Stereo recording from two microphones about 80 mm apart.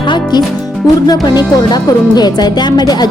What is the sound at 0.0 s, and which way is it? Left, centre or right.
Music, left.